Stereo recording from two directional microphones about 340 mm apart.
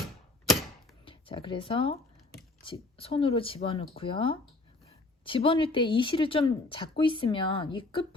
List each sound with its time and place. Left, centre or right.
1.0 s speech: centre